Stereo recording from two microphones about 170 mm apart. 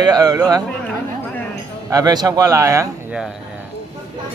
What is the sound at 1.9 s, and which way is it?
Speech, 20° right (ahead or behind).